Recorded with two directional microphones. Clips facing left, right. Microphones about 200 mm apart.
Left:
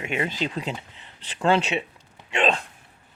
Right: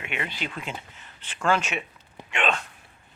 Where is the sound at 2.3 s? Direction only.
35° left (ahead or behind).